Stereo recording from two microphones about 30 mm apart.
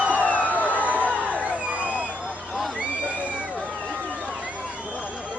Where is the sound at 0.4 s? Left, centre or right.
Left.